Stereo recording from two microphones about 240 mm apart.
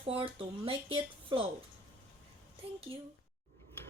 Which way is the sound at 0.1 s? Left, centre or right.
Right.